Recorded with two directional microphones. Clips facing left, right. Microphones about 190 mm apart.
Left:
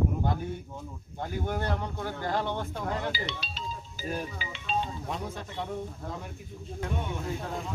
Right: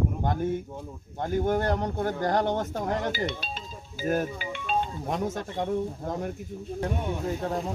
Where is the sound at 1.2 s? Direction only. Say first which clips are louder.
Right 7 dB; 45° right (ahead or behind).